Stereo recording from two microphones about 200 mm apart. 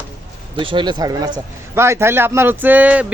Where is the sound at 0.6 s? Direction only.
25° right (ahead or behind).